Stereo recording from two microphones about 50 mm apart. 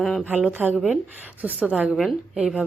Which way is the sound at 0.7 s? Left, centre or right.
Centre.